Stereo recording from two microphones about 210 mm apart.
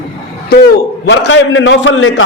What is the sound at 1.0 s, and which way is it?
A man's voice, 60° left (ahead or behind).